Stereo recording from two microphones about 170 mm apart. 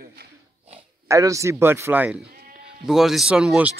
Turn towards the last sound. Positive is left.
turn(degrees=-5)  # may be behind; listen again after turning